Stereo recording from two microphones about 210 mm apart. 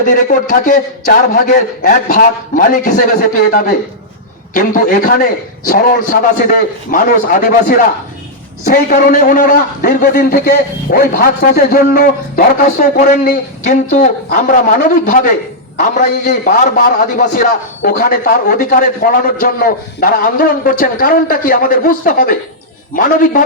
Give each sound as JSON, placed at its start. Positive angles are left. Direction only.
{"t": 0.0, "sound": "a man's voice", "side_deg": 40}